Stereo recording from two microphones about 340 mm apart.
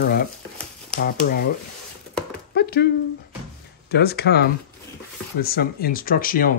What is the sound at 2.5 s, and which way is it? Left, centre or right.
Dog, left.